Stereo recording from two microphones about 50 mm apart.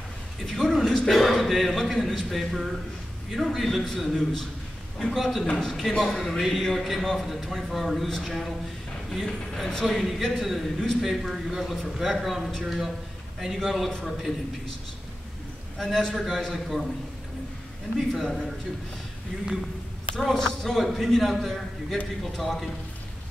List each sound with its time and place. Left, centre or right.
0.5 s a man's voice: centre
11.8 s a man's voice: centre
15.8 s a man's voice: centre
17.9 s a man's voice: centre
20.2 s a man's voice: centre